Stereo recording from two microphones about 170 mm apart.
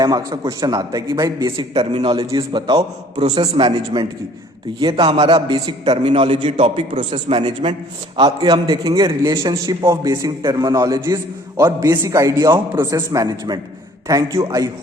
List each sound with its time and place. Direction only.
0.0 s a man's voice: 20° right (ahead or behind)